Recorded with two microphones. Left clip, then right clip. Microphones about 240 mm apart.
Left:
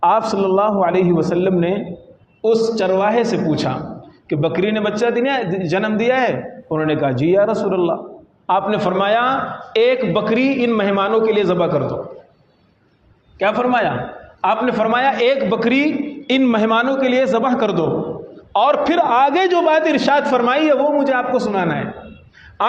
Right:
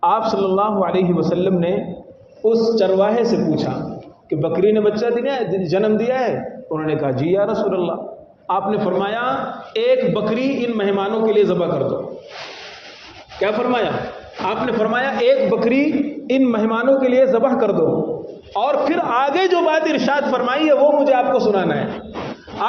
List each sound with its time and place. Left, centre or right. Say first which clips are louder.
0.0 s a man's voice: left 1 dB; left
13.4 s a man's voice: left 2 dB; left